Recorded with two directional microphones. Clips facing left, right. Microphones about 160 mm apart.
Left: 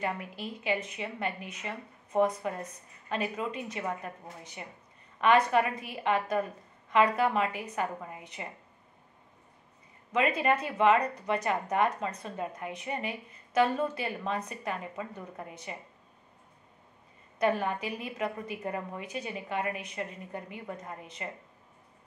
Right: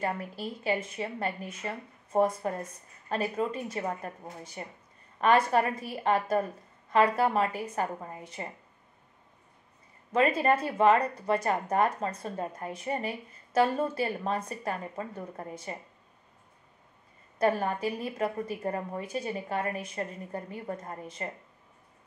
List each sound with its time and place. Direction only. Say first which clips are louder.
0.0 s a woman's voice: right 2 dB; 40° right (ahead or behind)
10.1 s a woman's voice: right 2 dB; 40° right (ahead or behind)
17.4 s a woman's voice: right 2 dB; 40° right (ahead or behind)